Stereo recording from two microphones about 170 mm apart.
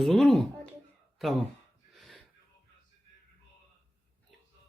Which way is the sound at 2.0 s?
Centre (ahead or behind).